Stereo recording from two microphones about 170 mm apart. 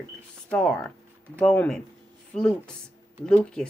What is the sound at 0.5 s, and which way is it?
Speech, 5° left (ahead or behind).